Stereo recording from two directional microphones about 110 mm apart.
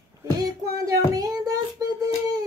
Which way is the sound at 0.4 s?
35° right (ahead or behind).